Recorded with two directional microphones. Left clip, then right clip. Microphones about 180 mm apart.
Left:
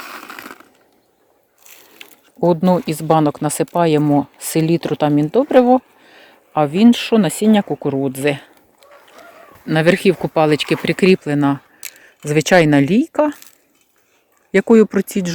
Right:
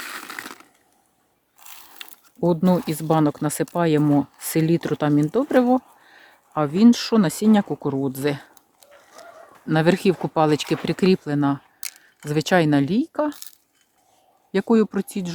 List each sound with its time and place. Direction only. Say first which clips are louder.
0.3 s a sound: left 1 dB; 10° left (ahead or behind)
2.4 s speech: left 6 dB; centre (ahead or behind)
9.6 s speech: left 5 dB; centre (ahead or behind); by 13.4 s 25° left (ahead or behind)
14.5 s speech: left 8 dB; 20° left (ahead or behind)